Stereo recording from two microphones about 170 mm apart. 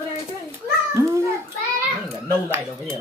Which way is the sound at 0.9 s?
15° right (ahead or behind).